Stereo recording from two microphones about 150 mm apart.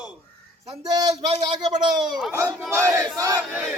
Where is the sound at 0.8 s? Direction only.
25° right (ahead or behind).